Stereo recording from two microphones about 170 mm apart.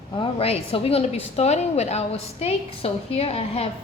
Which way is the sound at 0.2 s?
35° left (ahead or behind).